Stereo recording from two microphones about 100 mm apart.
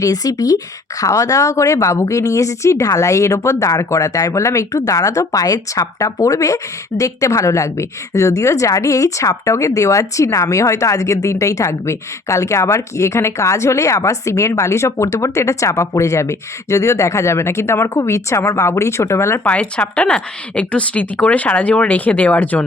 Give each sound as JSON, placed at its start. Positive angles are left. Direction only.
{"t": 0.0, "sound": "a woman's voice", "side_deg": 35}
{"t": 19.5, "sound": "a woman's voice", "side_deg": 15}